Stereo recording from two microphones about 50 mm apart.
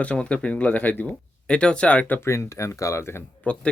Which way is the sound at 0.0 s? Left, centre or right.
Left.